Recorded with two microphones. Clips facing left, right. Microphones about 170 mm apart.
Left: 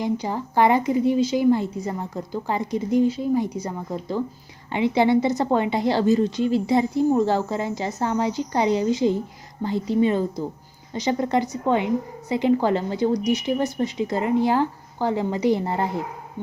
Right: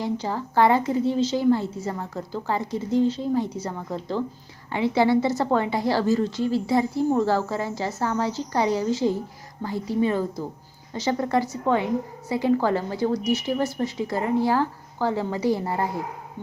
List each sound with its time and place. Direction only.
0.0 s a woman's voice: 15° left (ahead or behind)